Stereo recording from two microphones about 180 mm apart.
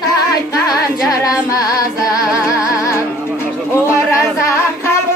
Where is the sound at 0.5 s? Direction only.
20° left (ahead or behind).